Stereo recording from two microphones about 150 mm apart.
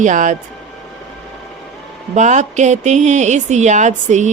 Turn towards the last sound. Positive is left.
turn(degrees=-50)  # may be behind; listen again after turning